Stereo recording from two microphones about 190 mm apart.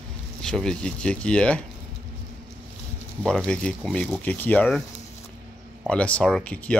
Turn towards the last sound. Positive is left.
turn(degrees=5)  # may be behind; listen again after turning